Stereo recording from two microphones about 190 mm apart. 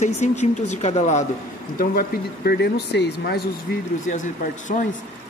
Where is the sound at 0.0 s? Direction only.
40° left (ahead or behind).